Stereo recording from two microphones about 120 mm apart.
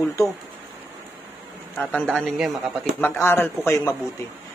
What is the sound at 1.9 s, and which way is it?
Speech, 5° left (ahead or behind).